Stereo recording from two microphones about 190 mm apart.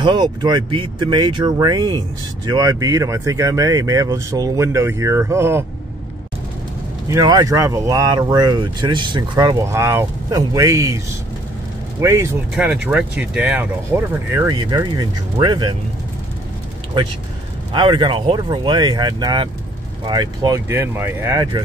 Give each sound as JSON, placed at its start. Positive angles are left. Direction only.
{"t": 0.0, "sound": "speech", "side_deg": -25}
{"t": 7.1, "sound": "speech", "side_deg": -20}
{"t": 12.0, "sound": "speech", "side_deg": -15}
{"t": 17.7, "sound": "speech", "side_deg": -25}